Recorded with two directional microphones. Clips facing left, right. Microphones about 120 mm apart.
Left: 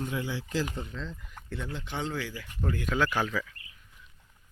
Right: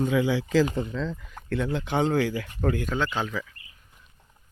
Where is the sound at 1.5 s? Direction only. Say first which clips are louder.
Right 10 dB; 75° right (ahead or behind); by 2.8 s 55° right (ahead or behind).